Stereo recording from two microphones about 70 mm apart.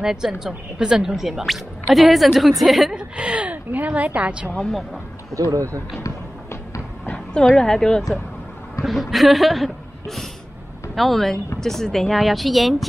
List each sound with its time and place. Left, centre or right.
0.0 s speech: centre
3.0 s a woman's voice: centre
4.6 s speech: centre
5.3 s speech: right
6.0 s a sound: left
7.4 s speech: centre
8.8 s speech: centre